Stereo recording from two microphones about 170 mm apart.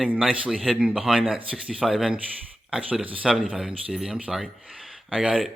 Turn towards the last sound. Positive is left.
turn(degrees=-5)  # may be behind; listen again after turning